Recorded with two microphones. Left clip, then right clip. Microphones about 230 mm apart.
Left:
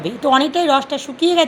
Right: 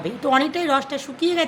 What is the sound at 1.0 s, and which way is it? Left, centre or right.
Speech, centre.